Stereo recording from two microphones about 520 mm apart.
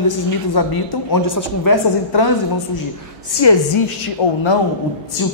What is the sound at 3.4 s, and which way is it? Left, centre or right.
Speech, left.